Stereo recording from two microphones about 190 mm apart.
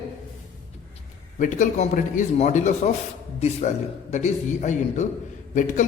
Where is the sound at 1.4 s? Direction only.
40° left (ahead or behind).